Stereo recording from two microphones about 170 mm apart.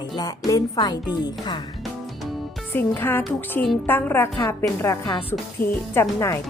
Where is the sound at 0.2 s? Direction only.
20° left (ahead or behind).